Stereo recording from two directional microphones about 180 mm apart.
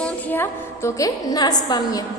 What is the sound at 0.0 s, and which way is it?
A woman's voice, 10° left (ahead or behind).